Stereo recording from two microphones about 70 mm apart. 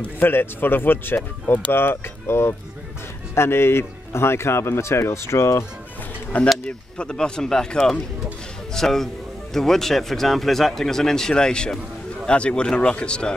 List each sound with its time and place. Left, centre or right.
0.0 s speech: left
6.6 s a man's voice: centre